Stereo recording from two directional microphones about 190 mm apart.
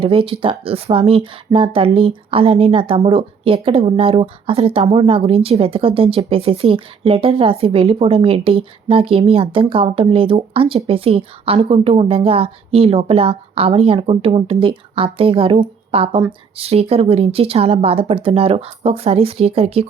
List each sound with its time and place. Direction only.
0.0 s speech: 30° right (ahead or behind)